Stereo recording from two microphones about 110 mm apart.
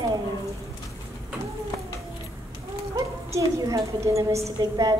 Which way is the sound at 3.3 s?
30° right (ahead or behind).